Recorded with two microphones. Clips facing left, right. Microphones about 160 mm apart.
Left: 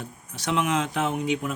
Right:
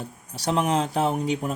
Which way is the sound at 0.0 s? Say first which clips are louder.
Right 4 dB; 35° right (ahead or behind).